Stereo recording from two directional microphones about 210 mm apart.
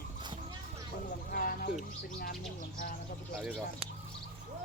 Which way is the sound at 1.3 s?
40° left (ahead or behind).